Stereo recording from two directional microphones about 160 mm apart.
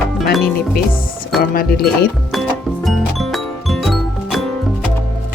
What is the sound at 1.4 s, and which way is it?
Speech, 75° left (ahead or behind).